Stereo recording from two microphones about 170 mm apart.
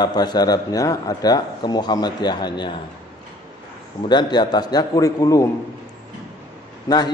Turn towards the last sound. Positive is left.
turn(degrees=25)  # may be behind; listen again after turning